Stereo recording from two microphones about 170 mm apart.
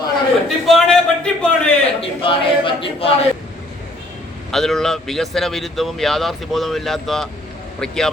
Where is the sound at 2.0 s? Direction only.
30° left (ahead or behind).